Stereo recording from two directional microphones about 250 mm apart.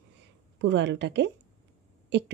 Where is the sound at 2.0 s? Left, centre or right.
Right.